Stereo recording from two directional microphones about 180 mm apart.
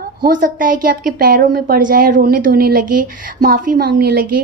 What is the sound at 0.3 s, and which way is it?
A woman's voice, 50° right (ahead or behind).